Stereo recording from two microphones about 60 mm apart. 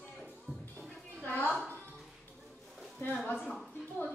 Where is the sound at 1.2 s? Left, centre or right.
Left.